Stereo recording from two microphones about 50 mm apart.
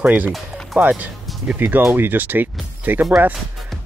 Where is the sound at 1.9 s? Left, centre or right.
Right.